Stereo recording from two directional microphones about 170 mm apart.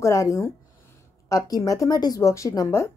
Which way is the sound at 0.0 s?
15° left (ahead or behind).